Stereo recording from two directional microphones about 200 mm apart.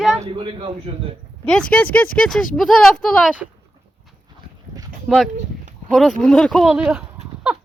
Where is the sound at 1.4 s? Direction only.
5° left (ahead or behind).